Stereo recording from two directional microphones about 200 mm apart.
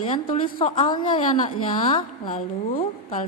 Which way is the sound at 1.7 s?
35° left (ahead or behind).